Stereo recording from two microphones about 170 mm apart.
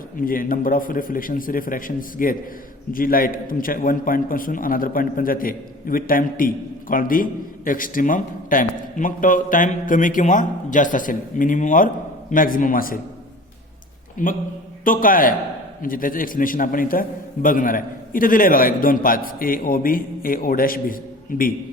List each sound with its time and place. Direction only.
0.2 s a man's voice: 55° left (ahead or behind)
14.2 s a man's voice: 50° left (ahead or behind)